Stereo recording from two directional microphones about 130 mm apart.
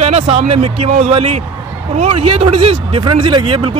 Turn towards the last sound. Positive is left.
turn(degrees=-40)  # may be behind; listen again after turning